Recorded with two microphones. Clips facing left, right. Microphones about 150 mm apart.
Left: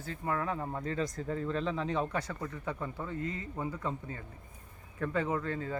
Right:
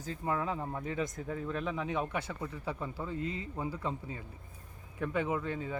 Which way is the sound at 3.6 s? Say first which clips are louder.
Left 1 dB; 10° right (ahead or behind).